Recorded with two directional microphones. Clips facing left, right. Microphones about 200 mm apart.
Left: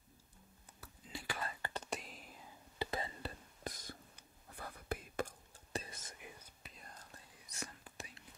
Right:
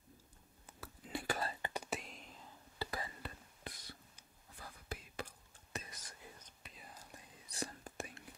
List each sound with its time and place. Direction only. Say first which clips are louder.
0.7 s whispering: right 6 dB; 60° right (ahead or behind)
1.2 s whispering: right 4 dB; 45° right (ahead or behind)
1.6 s whispering: right 1 dB; 10° right (ahead or behind); by 2.5 s 5° left (ahead or behind)
2.8 s whispering: left 3 dB; 25° left (ahead or behind); by 3.9 s 45° left (ahead or behind)
4.6 s whispering: left 6 dB; 55° left (ahead or behind)
5.7 s whispering: left 4 dB; 30° left (ahead or behind)
6.6 s whispering: right 3 dB; centre (ahead or behind)
7.3 s whispering: right 5 dB; 30° right (ahead or behind)